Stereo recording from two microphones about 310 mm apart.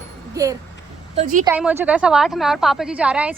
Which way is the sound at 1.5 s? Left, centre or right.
Centre.